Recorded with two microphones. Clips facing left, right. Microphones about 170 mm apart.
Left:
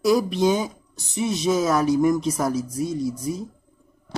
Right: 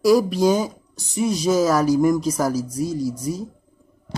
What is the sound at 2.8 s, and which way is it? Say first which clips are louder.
Speech: right 2 dB; 35° right (ahead or behind).